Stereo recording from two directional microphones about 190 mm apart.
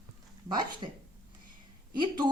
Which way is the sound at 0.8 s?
25° right (ahead or behind).